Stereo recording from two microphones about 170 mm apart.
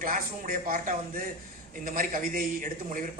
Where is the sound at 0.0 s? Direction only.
55° right (ahead or behind).